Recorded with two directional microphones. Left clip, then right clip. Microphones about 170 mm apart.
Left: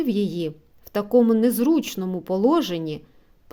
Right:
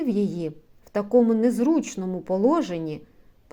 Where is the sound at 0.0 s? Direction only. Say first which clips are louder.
Left 2 dB; 30° left (ahead or behind).